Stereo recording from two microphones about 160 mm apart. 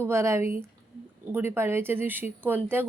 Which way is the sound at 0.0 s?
15° right (ahead or behind).